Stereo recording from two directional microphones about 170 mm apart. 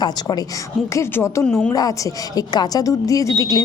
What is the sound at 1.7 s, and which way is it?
A woman's voice, 20° left (ahead or behind).